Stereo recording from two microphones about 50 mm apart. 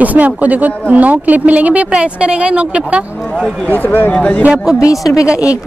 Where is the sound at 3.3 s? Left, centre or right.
Centre.